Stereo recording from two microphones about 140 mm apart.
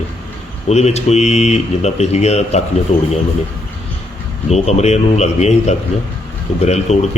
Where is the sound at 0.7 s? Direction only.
50° left (ahead or behind).